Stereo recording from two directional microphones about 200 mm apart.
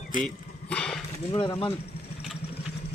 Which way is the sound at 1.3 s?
25° left (ahead or behind).